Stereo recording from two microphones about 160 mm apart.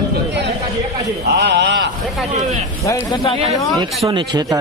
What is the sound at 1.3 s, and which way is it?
Speech, 90° right.